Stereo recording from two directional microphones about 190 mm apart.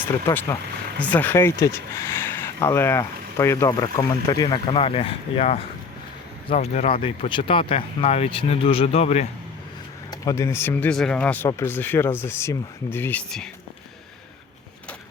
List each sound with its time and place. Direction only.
0.3 s speech: 15° left (ahead or behind); by 9.2 s 35° left (ahead or behind)
10.1 s speech: 15° left (ahead or behind)